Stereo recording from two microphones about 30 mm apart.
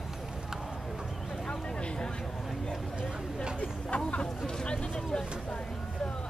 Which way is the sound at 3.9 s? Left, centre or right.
Left.